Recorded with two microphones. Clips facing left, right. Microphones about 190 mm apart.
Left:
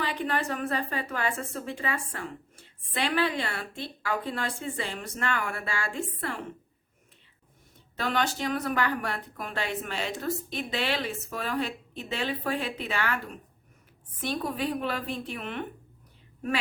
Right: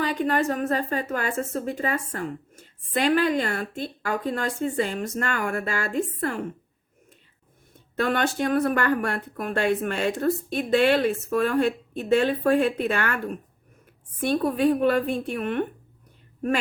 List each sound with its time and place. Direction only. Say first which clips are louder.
0.0 s a woman's voice: right 6 dB; 45° right (ahead or behind)
7.9 s a woman's voice: right 5 dB; 55° right (ahead or behind)